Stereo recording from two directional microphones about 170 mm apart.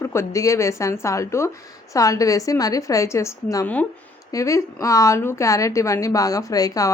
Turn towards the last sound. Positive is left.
turn(degrees=20)  # may be behind; listen again after turning